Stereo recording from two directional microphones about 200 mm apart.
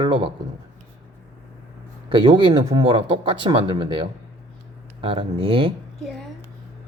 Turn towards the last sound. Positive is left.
turn(degrees=-25)  # may be behind; listen again after turning